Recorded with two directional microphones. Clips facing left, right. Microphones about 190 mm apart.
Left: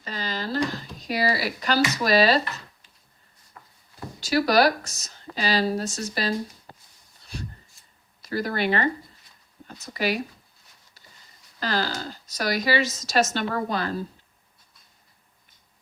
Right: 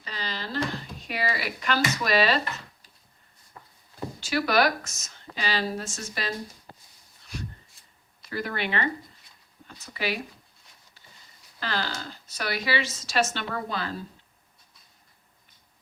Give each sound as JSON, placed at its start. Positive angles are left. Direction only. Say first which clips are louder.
{"t": 0.0, "sound": "a sound", "louder": "left 5 dB", "side_deg": 45}
{"t": 0.7, "sound": "speech", "louder": "left 4 dB", "side_deg": 40}
{"t": 4.2, "sound": "speech", "louder": "left 4 dB", "side_deg": 40}
{"t": 7.3, "sound": "a sound", "louder": "left 1 dB", "side_deg": 30}
{"t": 8.2, "sound": "speech", "louder": "left 5 dB", "side_deg": 40}
{"t": 11.6, "sound": "speech", "louder": "left 4 dB", "side_deg": 40}